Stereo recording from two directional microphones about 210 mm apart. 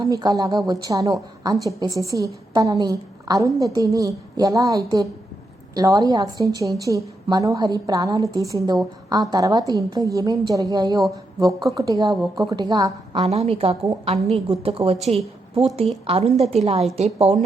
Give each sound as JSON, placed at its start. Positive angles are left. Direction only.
{"t": 0.0, "sound": "a woman's voice", "side_deg": -15}
{"t": 13.2, "sound": "a woman's voice", "side_deg": -30}
{"t": 16.0, "sound": "a woman's voice", "side_deg": -30}